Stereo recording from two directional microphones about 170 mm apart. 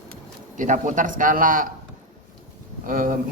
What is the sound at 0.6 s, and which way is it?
A man's voice, 45° right (ahead or behind).